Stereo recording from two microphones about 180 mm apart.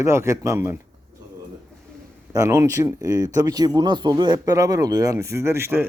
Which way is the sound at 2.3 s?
20° right (ahead or behind).